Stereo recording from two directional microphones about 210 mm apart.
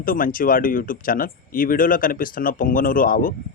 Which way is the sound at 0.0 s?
40° left (ahead or behind).